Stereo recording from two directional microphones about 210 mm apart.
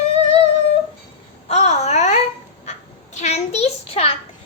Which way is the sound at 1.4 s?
30° left (ahead or behind).